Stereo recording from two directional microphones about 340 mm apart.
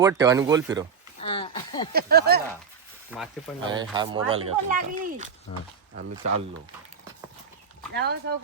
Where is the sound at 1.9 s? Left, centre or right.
Right.